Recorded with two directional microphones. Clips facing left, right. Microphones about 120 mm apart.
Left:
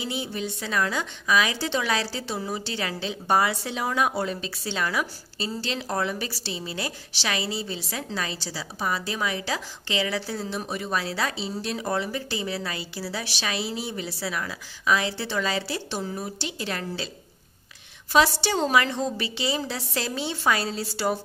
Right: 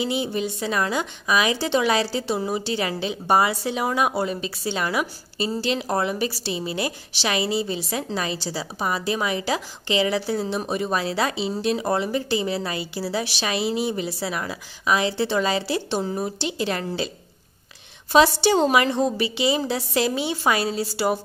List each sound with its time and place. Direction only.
0.0 s a woman's voice: 20° right (ahead or behind)
18.1 s a woman's voice: 20° right (ahead or behind)